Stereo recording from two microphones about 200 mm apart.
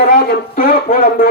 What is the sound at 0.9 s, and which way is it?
Speech, 40° left (ahead or behind).